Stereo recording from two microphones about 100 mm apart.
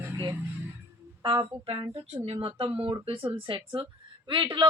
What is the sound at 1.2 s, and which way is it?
A woman's voice, 60° right (ahead or behind).